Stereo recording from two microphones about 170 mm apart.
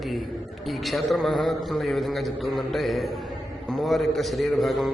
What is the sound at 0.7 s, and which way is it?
A man's voice, centre (ahead or behind).